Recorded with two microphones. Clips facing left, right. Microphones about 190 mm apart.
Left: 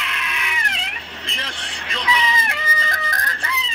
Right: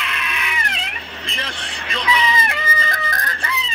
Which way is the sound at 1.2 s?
60° right (ahead or behind).